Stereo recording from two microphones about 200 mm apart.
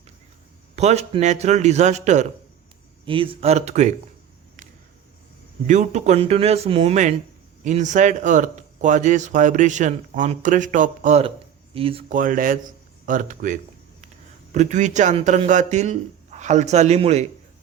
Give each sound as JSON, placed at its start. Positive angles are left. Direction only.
{"t": 0.8, "sound": "a man's voice", "side_deg": -35}
{"t": 5.6, "sound": "a man's voice", "side_deg": -40}
{"t": 12.1, "sound": "a man's voice", "side_deg": -45}